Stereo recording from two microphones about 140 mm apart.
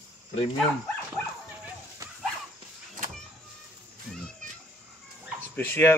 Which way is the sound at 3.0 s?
80° right.